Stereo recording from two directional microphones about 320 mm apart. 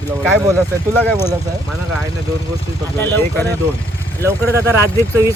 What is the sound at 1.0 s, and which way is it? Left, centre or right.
Speech, centre.